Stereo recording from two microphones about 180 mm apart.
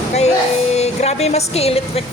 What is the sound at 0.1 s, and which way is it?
A woman's voice, 35° left (ahead or behind).